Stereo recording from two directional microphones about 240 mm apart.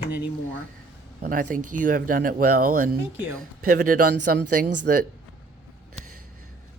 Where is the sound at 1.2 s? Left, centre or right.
Right.